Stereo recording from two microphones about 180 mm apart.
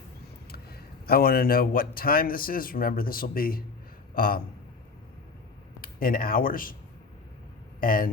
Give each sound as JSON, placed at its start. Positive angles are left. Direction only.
{"t": 0.5, "sound": "speech", "side_deg": 60}
{"t": 5.8, "sound": "speech", "side_deg": 55}
{"t": 7.8, "sound": "speech", "side_deg": 50}